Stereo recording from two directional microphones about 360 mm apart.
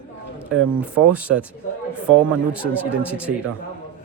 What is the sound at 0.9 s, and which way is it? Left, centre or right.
Speech, centre.